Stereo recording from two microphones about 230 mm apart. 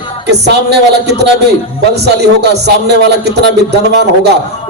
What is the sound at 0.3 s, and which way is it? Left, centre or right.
A man's voice, right.